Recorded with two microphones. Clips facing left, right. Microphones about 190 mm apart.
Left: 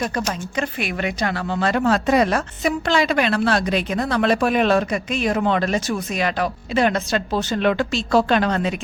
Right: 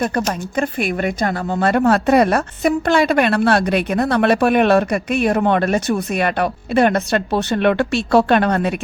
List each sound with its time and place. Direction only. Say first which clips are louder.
0.0 s speech: right 4 dB; 50° right (ahead or behind)